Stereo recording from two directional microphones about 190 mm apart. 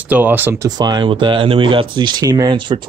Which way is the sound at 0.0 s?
10° right (ahead or behind).